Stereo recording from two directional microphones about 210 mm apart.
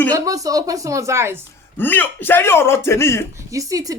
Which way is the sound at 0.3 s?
15° right (ahead or behind).